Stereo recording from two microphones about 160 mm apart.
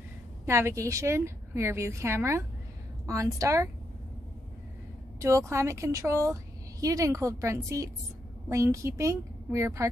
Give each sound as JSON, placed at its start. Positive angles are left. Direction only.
{"t": 0.5, "sound": "a woman's voice", "side_deg": -15}
{"t": 5.2, "sound": "a woman's voice", "side_deg": -20}